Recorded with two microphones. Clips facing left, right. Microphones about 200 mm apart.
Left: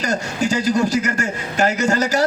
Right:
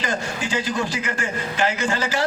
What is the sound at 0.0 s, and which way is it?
A man's voice, 45° left (ahead or behind).